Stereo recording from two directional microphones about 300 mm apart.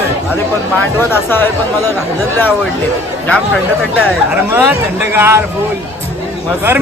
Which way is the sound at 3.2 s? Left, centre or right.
Centre.